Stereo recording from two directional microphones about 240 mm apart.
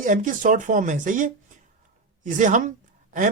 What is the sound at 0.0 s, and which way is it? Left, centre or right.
Speech, right.